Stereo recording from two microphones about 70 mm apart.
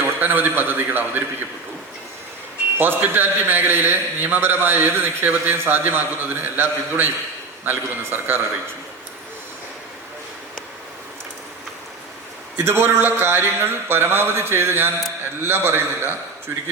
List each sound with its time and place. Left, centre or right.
0.0 s a man's voice: right
2.7 s a man's voice: right
12.6 s a man's voice: right